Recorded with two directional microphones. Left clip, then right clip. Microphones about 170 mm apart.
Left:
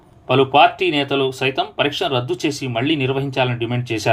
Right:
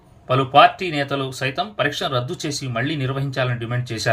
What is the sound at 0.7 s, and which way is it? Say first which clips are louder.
Speech: left 5 dB; 10° left (ahead or behind).